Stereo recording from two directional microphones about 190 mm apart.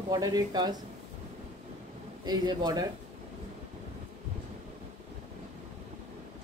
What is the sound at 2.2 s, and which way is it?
Speech, 20° right (ahead or behind).